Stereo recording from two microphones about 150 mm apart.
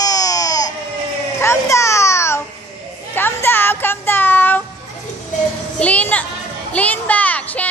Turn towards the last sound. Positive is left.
turn(degrees=10)  # may be behind; listen again after turning